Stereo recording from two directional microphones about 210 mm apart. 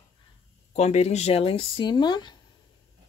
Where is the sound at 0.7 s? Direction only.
30° left (ahead or behind).